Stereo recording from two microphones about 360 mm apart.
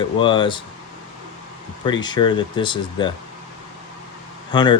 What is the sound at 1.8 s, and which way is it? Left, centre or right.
Speech, centre.